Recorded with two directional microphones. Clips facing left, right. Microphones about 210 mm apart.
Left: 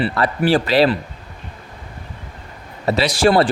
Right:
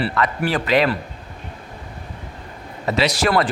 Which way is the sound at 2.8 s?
30° left (ahead or behind).